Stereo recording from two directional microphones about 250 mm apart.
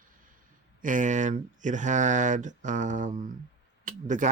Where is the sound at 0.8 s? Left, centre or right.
Right.